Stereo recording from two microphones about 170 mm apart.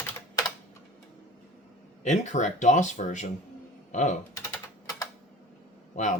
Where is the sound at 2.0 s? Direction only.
45° left (ahead or behind).